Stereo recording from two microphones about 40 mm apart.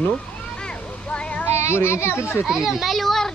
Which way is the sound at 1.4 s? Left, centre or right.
Left.